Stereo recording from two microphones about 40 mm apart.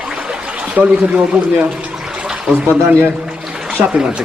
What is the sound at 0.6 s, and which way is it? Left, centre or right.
Speech, right.